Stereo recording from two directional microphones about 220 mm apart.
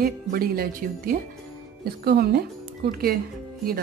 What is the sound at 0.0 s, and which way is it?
A woman's voice, 40° right (ahead or behind).